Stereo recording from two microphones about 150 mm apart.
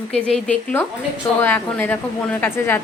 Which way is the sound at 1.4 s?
10° left (ahead or behind).